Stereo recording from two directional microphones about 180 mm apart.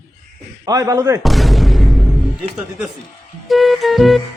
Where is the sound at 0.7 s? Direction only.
20° right (ahead or behind).